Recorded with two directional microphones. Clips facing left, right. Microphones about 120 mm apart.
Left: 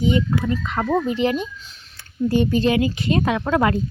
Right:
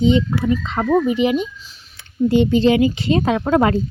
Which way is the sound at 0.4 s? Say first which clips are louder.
Right 4 dB; 20° right (ahead or behind).